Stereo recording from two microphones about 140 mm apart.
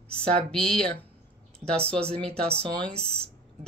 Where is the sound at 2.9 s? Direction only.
45° right (ahead or behind).